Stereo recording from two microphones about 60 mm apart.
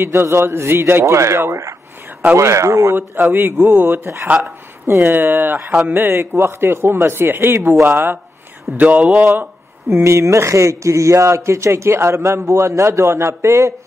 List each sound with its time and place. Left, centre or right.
0.0 s speech: right
3.0 s a man's voice: right
4.3 s speech: right
4.8 s a man's voice: right
8.7 s speech: right
9.2 s a man's voice: right
9.8 s speech: right